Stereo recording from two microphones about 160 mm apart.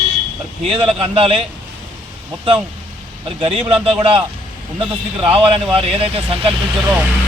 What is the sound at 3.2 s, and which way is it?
Speech, 35° right (ahead or behind).